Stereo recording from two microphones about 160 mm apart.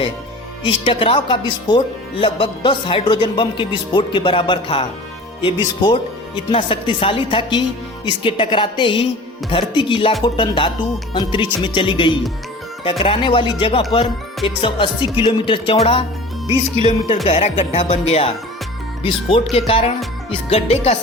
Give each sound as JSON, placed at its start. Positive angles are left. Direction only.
{"t": 0.6, "sound": "speech", "side_deg": 35}
{"t": 19.5, "sound": "speech", "side_deg": 35}